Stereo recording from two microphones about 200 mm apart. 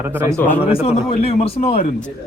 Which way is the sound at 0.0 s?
10° right (ahead or behind).